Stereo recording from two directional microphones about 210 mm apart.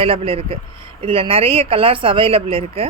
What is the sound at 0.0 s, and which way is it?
Speech, 25° right (ahead or behind).